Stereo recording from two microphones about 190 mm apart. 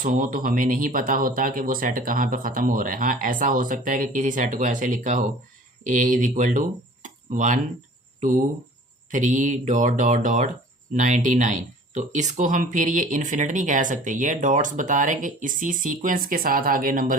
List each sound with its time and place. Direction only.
0.0 s speech: 45° right (ahead or behind)
9.0 s speech: 40° right (ahead or behind)